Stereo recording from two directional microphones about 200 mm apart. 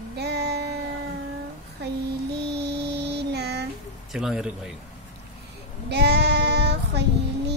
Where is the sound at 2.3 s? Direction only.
55° right (ahead or behind).